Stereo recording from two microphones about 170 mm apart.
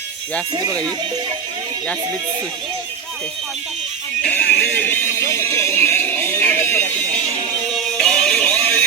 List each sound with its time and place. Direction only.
0.5 s speech: 25° right (ahead or behind)
4.2 s music: 10° left (ahead or behind)
7.8 s music: centre (ahead or behind)